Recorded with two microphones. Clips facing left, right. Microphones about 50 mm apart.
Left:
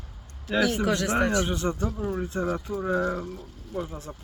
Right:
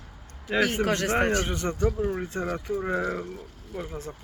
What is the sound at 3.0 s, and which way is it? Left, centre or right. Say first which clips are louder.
Speech: left 1 dB; right.